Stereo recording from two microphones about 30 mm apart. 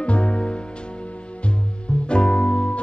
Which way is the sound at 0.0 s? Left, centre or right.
Left.